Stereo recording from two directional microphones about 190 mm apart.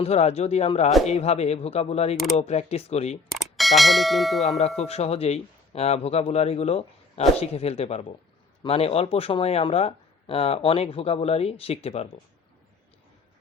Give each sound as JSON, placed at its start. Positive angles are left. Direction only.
{"t": 0.0, "sound": "speech", "side_deg": 35}
{"t": 3.3, "sound": "speech", "side_deg": 0}
{"t": 4.8, "sound": "speech", "side_deg": 35}